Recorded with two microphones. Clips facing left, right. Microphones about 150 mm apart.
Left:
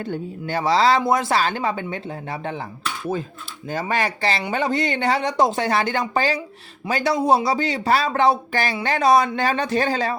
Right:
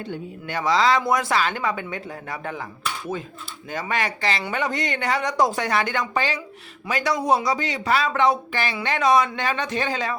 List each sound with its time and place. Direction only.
0.4 s speech: 30° left (ahead or behind)
3.7 s speech: 35° left (ahead or behind)